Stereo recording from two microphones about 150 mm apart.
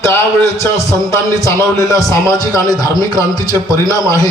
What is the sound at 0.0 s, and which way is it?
A man's voice, 20° left (ahead or behind).